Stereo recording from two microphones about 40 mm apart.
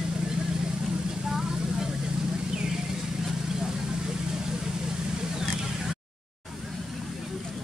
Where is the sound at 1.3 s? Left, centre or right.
Centre.